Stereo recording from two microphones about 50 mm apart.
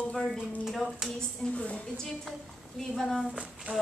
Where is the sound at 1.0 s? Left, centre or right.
Centre.